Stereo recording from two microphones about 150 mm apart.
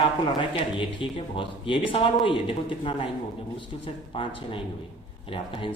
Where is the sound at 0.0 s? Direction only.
35° left (ahead or behind).